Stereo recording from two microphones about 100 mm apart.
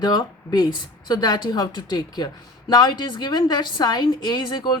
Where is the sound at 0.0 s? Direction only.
40° left (ahead or behind).